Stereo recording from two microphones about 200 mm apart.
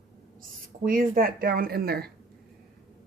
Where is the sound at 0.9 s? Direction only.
45° right (ahead or behind).